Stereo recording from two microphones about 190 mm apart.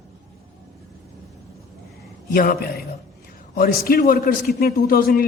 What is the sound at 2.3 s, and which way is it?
A woman's voice, 50° left (ahead or behind).